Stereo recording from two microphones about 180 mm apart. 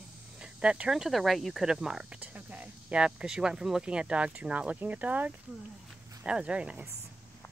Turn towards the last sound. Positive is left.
turn(degrees=-5)  # may be behind; listen again after turning